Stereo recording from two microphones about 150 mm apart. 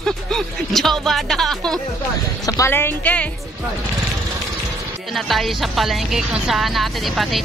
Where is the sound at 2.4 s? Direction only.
20° left (ahead or behind).